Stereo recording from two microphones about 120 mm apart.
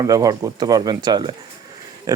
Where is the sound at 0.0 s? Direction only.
30° right (ahead or behind).